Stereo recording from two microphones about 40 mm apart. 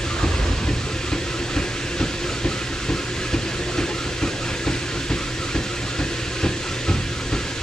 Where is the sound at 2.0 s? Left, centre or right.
Centre.